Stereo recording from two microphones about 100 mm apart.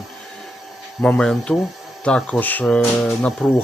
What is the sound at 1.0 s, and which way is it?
Speech, 10° left (ahead or behind).